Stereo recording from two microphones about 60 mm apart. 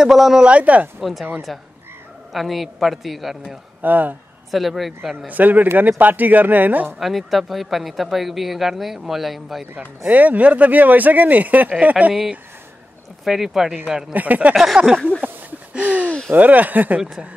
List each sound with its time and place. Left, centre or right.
0.0 s speech: centre
0.5 s speech: right
1.5 s speech: centre
3.8 s speech: right
4.5 s speech: centre
5.3 s speech: right
7.0 s speech: centre
9.8 s speech: right
13.2 s speech: centre
14.1 s speech: right
14.5 s speech: centre
15.2 s a sound: right
15.7 s speech: right